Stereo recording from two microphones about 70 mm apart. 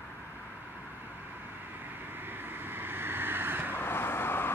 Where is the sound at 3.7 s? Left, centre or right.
Left.